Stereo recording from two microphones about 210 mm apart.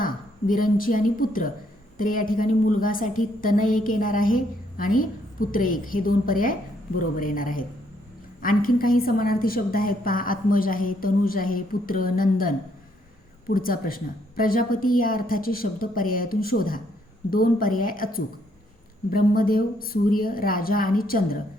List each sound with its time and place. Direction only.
0.0 s a woman's voice: 40° left (ahead or behind)